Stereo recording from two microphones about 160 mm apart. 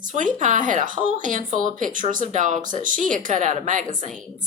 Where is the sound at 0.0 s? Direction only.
55° right (ahead or behind).